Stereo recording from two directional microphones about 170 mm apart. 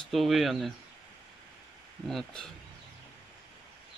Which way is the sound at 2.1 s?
Centre (ahead or behind).